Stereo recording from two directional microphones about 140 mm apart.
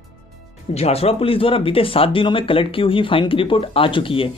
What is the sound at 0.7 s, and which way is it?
Speech, 50° left (ahead or behind).